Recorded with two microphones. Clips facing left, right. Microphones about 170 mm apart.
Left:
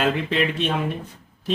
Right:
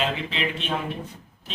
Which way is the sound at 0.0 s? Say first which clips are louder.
Left 5 dB; 55° left (ahead or behind).